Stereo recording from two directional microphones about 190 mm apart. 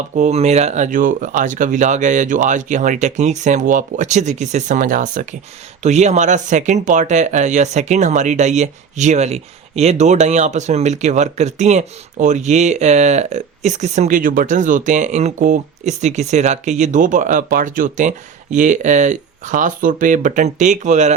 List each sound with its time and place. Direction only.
0.2 s speech: 35° right (ahead or behind)